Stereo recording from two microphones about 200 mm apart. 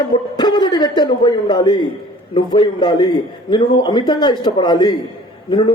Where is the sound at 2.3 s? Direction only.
25° left (ahead or behind).